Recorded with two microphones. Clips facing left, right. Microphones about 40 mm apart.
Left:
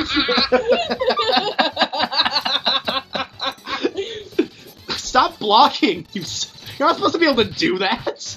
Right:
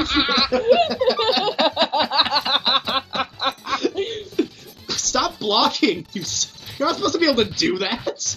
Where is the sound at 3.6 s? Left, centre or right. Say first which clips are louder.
Left 1 dB; centre.